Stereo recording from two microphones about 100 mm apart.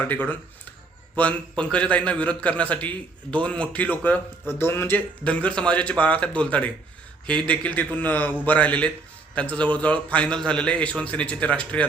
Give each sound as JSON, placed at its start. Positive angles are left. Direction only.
{"t": 0.1, "sound": "speech", "side_deg": 15}